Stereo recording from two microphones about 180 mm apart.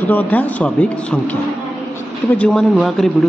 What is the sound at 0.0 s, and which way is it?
A man's voice, 10° left (ahead or behind).